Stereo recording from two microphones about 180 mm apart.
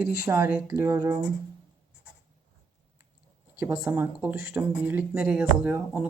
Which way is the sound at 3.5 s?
10° right (ahead or behind).